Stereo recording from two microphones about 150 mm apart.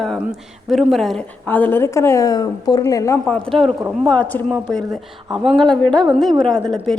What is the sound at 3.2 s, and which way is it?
A woman's voice, 5° left (ahead or behind).